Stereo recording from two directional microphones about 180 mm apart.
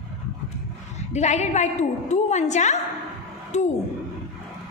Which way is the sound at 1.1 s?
40° left (ahead or behind).